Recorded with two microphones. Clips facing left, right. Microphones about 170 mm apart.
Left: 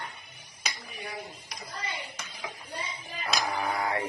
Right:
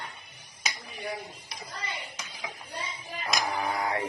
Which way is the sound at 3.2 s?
20° right (ahead or behind).